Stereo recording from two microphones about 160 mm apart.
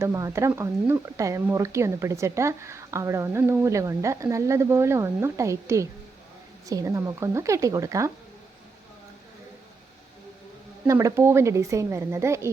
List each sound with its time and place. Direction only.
0.0 s speech: 20° right (ahead or behind)
10.8 s speech: 15° right (ahead or behind)